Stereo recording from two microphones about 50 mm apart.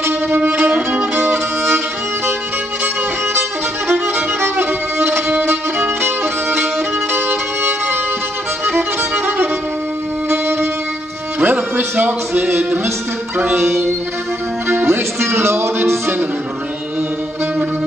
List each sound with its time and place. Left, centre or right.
0.4 s violin: right
1.1 s music: right
3.9 s violin: right
5.4 s music: right
11.3 s speech: right
13.4 s music: right
14.9 s speech: right